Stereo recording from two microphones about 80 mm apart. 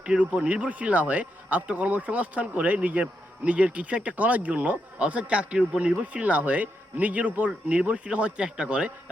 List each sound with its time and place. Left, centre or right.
0.0 s speech: centre